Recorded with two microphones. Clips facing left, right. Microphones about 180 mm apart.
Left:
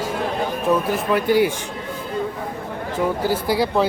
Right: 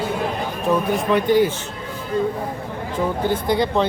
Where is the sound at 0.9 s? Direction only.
5° left (ahead or behind).